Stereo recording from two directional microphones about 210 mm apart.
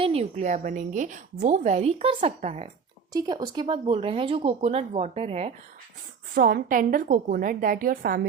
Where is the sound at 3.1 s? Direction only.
20° right (ahead or behind).